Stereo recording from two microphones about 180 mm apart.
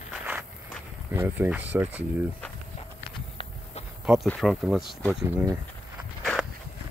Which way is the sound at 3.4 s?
30° left (ahead or behind).